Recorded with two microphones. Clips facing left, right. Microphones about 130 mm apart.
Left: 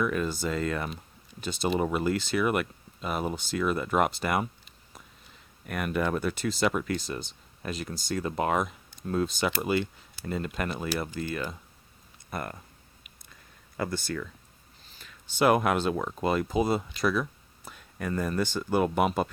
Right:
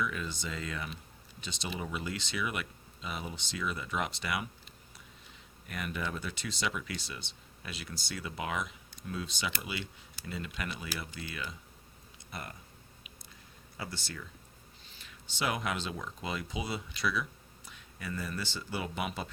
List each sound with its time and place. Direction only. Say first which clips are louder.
0.0 s speech: left 8 dB; 50° left (ahead or behind)
5.6 s speech: left 9 dB; 55° left (ahead or behind)
13.7 s speech: left 11 dB; 50° left (ahead or behind)